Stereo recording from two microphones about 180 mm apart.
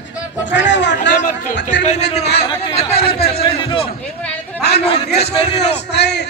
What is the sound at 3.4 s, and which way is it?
Speech, 30° left (ahead or behind).